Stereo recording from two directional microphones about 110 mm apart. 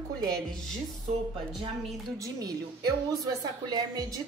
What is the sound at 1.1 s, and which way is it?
Speech, 90° right.